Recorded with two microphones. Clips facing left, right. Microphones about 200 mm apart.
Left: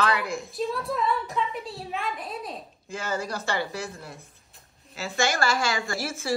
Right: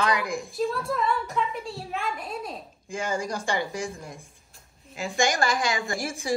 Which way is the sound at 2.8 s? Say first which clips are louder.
Right 2 dB; 15° right (ahead or behind).